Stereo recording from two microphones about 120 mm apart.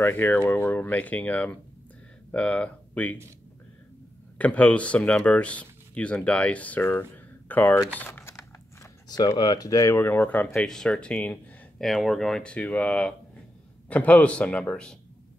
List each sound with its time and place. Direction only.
0.0 s speech: 15° left (ahead or behind)
4.4 s speech: 10° left (ahead or behind)
8.0 s a sound: 20° left (ahead or behind)
9.1 s speech: 35° left (ahead or behind); by 15.0 s 5° left (ahead or behind)